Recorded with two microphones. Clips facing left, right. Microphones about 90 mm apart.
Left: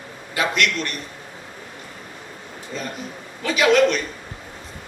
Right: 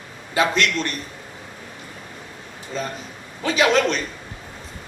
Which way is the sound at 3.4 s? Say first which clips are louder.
Left 2 dB; 30° right (ahead or behind).